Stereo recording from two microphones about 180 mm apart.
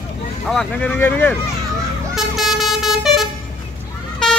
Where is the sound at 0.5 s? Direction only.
5° left (ahead or behind).